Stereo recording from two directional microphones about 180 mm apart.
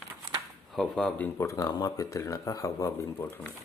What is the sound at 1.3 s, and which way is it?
Speech, 20° left (ahead or behind).